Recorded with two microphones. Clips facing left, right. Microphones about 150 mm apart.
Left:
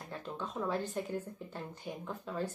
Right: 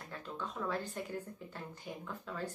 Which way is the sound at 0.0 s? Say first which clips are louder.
Left 2 dB; 20° left (ahead or behind).